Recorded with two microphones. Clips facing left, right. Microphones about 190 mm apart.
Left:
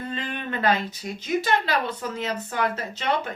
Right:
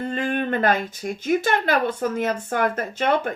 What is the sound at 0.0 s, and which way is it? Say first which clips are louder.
Speech: right 7 dB; 50° right (ahead or behind).